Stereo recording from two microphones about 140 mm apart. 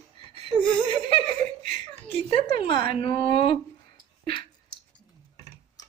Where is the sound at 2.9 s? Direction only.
40° left (ahead or behind).